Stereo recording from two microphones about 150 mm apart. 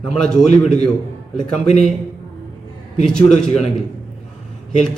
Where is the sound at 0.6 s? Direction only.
5° left (ahead or behind).